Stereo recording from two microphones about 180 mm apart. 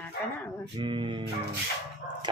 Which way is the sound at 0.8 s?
25° right (ahead or behind).